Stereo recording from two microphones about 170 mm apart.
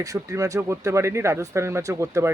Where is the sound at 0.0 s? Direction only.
20° right (ahead or behind).